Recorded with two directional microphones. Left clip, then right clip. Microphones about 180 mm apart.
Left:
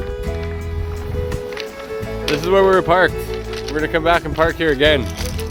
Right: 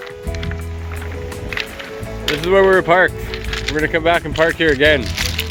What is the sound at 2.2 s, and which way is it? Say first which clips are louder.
Speech: right 1 dB; 10° left (ahead or behind).